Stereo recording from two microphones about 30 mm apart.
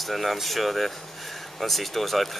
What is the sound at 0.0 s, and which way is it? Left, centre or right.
Speech, centre.